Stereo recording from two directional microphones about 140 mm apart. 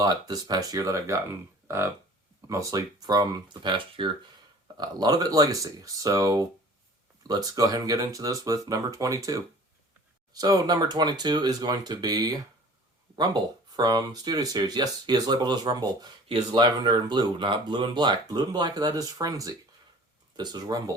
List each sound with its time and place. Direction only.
0.0 s speech: 30° right (ahead or behind)
13.7 s speech: 30° right (ahead or behind)